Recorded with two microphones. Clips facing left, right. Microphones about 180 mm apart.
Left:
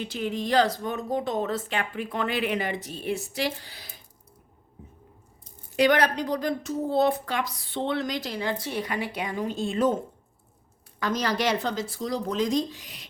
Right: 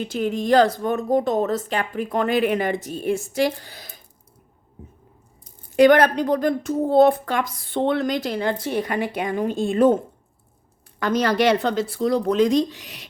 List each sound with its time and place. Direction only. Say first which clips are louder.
0.0 s speech: right 6 dB; 45° right (ahead or behind)
5.7 s speech: right 7 dB; 50° right (ahead or behind)
11.0 s speech: right 7 dB; 60° right (ahead or behind)